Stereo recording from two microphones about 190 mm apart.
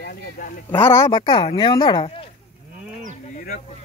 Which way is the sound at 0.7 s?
10° left (ahead or behind).